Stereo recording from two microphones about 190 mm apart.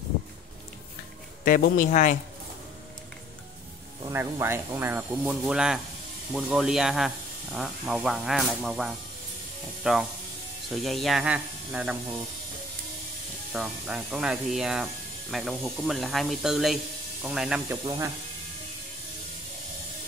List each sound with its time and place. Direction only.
1.4 s a man's voice: 50° left (ahead or behind)
4.0 s speech: 10° right (ahead or behind)
13.5 s speech: 5° right (ahead or behind)
17.8 s speech: 15° right (ahead or behind)